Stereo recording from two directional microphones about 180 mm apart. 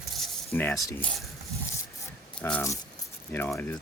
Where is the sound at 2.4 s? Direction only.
10° left (ahead or behind).